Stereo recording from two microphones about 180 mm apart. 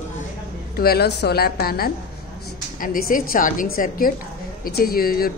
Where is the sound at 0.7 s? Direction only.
60° left (ahead or behind).